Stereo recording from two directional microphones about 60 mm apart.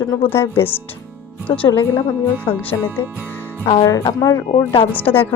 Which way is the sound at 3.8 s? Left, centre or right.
Left.